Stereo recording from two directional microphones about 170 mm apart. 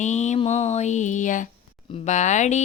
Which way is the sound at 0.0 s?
45° left (ahead or behind).